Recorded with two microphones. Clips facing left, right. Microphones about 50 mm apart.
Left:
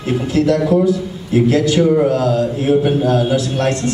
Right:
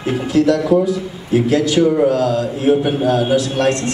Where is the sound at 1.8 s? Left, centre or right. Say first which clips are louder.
Even; centre.